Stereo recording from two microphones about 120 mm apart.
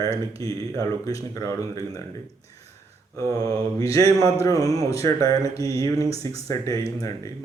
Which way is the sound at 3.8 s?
25° left (ahead or behind).